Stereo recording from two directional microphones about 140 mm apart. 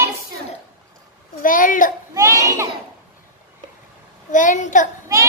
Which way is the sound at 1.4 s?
75° left (ahead or behind).